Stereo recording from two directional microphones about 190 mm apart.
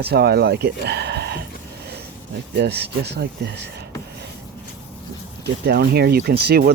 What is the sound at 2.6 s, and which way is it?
Speech, 60° right (ahead or behind).